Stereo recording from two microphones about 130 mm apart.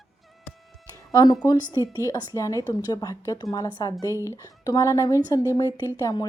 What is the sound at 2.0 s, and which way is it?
Speech, 25° left (ahead or behind).